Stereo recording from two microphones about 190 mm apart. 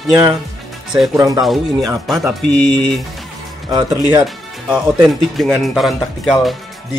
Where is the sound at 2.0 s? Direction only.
Centre (ahead or behind).